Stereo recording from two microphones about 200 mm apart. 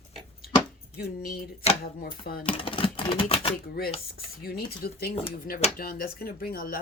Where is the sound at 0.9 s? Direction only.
50° left (ahead or behind).